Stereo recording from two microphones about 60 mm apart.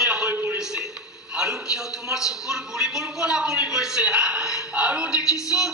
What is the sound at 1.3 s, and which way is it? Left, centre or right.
A man's voice, centre.